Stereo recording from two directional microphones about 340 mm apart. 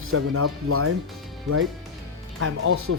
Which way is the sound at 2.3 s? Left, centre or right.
Right.